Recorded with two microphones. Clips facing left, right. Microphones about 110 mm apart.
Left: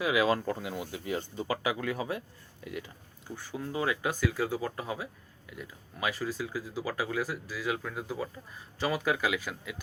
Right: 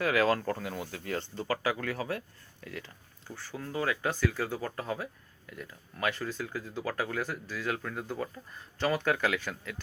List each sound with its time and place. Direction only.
0.0 s speech: 10° left (ahead or behind)